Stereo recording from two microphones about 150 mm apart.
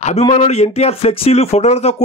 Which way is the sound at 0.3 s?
45° left (ahead or behind).